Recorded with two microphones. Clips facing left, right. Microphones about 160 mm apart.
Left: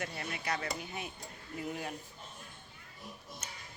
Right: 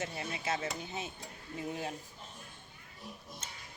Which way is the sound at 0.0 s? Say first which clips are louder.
Right 1 dB; 25° right (ahead or behind).